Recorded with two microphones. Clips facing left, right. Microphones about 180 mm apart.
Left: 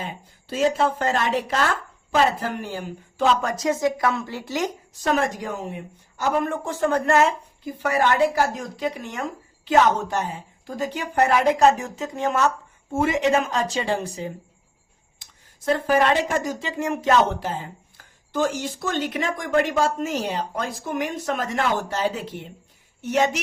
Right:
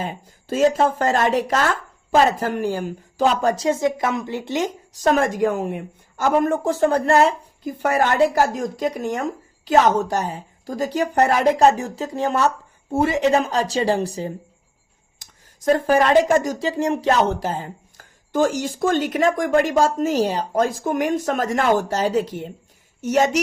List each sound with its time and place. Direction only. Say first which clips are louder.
0.0 s speech: right 5 dB; 45° right (ahead or behind)
3.4 s speech: right 3 dB; 30° right (ahead or behind)
5.0 s a woman's voice: right 5 dB; 50° right (ahead or behind)